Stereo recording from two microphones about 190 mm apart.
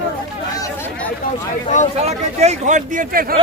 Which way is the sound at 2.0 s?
35° right (ahead or behind).